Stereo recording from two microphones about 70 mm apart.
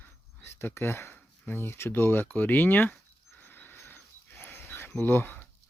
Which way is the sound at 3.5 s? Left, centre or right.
Left.